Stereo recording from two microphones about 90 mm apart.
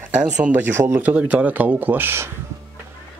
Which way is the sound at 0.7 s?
30° right (ahead or behind).